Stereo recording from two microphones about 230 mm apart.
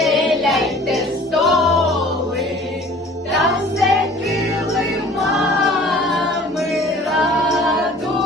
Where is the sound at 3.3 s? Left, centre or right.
Centre.